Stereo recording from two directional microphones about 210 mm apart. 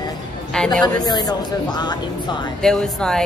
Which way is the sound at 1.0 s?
20° left (ahead or behind).